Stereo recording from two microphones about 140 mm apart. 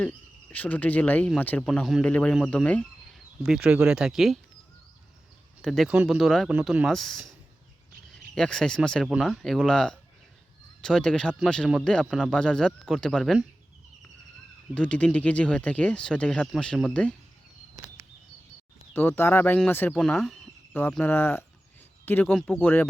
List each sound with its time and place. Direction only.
0.0 s speech: 10° left (ahead or behind)
1.6 s speech: centre (ahead or behind)
3.4 s speech: 5° right (ahead or behind)
5.6 s speech: centre (ahead or behind)
14.8 s speech: 10° left (ahead or behind)
18.9 s speech: 15° left (ahead or behind)
20.0 s speech: centre (ahead or behind)
20.9 s speech: 15° left (ahead or behind)